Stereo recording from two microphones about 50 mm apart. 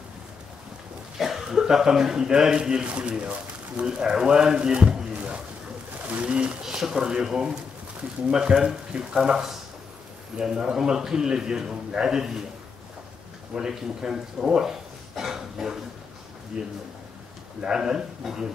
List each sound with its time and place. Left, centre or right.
1.1 s a man's voice: centre
6.6 s a man's voice: centre
13.6 s a man's voice: centre